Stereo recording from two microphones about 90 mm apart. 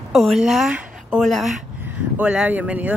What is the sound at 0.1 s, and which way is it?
A woman's voice, centre (ahead or behind).